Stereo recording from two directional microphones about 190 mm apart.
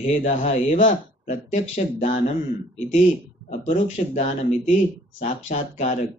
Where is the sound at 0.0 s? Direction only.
35° left (ahead or behind).